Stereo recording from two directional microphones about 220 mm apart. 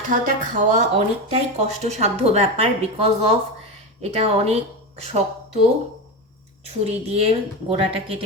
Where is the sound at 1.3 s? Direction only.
30° right (ahead or behind).